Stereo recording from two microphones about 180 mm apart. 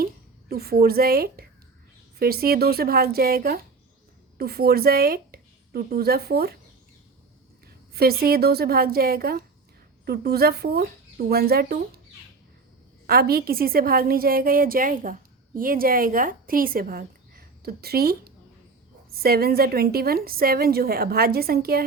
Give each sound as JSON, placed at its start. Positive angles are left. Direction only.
{"t": 0.0, "sound": "a woman's voice", "side_deg": -60}
{"t": 7.9, "sound": "a woman's voice", "side_deg": -60}
{"t": 13.1, "sound": "a woman's voice", "side_deg": -55}